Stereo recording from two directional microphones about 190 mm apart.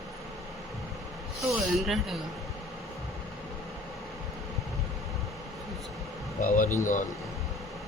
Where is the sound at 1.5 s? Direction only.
Centre (ahead or behind).